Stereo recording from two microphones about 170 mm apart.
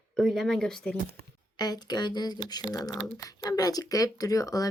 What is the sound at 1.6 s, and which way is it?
Speech, 25° left (ahead or behind).